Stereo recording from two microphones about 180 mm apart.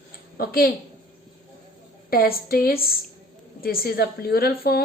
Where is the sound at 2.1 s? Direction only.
55° left (ahead or behind).